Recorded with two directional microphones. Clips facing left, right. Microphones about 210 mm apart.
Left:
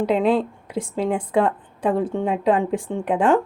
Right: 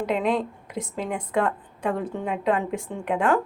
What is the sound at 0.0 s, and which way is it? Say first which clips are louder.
Speech: left 5 dB; 30° left (ahead or behind).